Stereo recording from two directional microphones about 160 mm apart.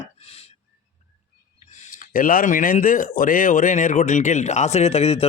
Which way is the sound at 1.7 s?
50° left (ahead or behind).